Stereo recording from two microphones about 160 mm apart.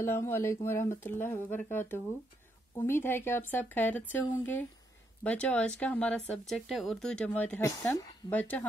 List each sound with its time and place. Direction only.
0.0 s speech: 15° left (ahead or behind)